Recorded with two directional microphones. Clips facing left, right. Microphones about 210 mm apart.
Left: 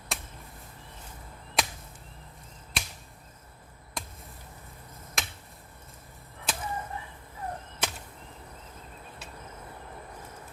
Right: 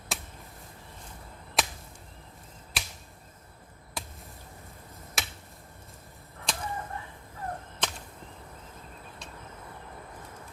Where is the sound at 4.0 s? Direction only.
5° right (ahead or behind).